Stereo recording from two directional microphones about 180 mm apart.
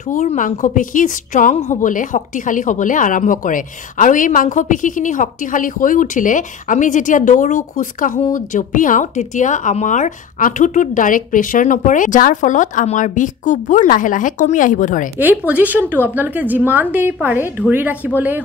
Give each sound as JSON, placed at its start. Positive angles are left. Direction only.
{"t": 0.1, "sound": "a woman's voice", "side_deg": 45}
{"t": 15.1, "sound": "a woman's voice", "side_deg": -10}